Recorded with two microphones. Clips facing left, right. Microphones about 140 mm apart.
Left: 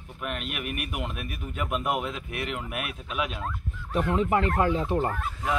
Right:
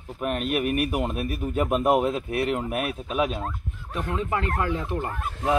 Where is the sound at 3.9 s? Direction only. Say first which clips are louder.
Left 3 dB; 25° left (ahead or behind).